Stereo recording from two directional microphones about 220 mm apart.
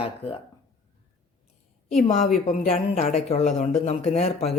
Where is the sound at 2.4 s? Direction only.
30° left (ahead or behind).